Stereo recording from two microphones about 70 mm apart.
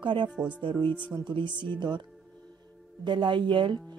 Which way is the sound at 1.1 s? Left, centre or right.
Right.